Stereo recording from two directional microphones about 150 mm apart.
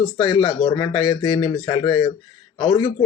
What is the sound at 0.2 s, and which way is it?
Speech, 40° left (ahead or behind).